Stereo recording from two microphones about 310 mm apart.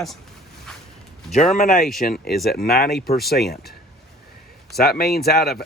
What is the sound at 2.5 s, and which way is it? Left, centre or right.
Speech, left.